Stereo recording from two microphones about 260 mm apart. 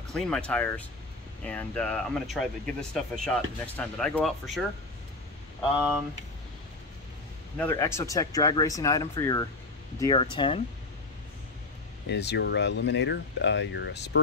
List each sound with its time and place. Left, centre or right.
0.1 s speech: centre
7.5 s speech: centre
12.1 s speech: left